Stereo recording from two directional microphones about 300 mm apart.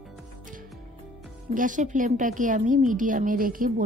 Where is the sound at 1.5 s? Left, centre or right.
Right.